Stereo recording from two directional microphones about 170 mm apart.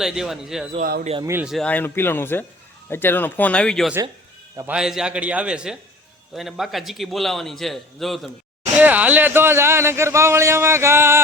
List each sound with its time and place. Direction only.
0.0 s a man's voice: centre (ahead or behind)
0.8 s speech: 60° right (ahead or behind)
1.2 s speech: 15° right (ahead or behind)
1.5 s a man's voice: 5° left (ahead or behind); by 11.2 s 15° right (ahead or behind)